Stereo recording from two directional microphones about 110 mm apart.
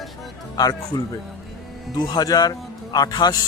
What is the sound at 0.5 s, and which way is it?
Speech, 35° left (ahead or behind).